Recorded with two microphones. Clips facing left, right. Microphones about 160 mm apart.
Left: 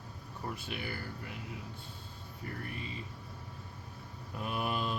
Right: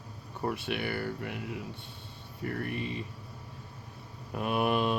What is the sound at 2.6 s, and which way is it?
Mantra, 65° right (ahead or behind).